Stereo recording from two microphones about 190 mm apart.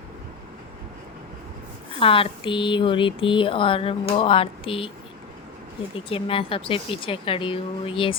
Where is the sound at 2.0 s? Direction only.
30° left (ahead or behind).